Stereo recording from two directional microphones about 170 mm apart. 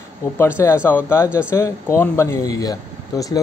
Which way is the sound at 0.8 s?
15° left (ahead or behind).